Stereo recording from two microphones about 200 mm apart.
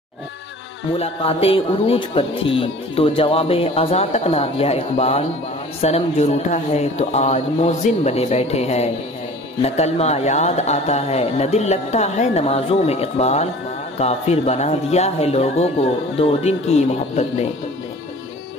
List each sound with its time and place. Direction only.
0.9 s a man's voice: 30° left (ahead or behind)